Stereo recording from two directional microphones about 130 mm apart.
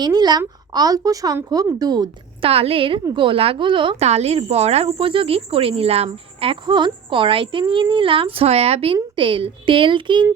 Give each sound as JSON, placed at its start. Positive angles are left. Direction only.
{"t": 0.0, "sound": "a woman's voice", "side_deg": -30}
{"t": 2.4, "sound": "speech", "side_deg": -50}
{"t": 4.0, "sound": "a woman's voice", "side_deg": -55}